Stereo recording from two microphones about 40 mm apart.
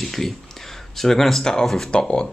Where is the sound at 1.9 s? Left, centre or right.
Left.